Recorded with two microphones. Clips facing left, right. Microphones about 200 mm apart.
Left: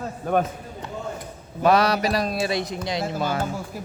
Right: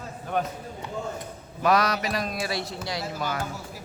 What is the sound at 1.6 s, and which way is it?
Speech, 30° left (ahead or behind).